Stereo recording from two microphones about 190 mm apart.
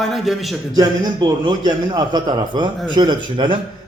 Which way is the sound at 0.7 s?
20° right (ahead or behind).